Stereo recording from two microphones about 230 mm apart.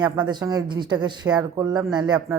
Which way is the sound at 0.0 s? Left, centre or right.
Centre.